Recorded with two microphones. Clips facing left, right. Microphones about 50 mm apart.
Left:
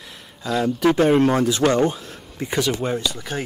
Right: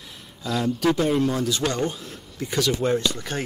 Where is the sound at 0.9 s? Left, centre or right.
Left.